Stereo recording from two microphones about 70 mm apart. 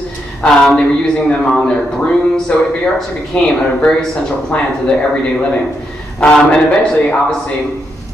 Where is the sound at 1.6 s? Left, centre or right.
Centre.